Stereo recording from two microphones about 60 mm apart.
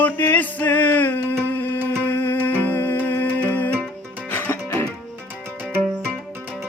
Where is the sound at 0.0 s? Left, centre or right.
Left.